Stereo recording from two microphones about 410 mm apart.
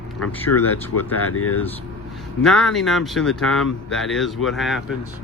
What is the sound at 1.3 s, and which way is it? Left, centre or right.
Speech, left.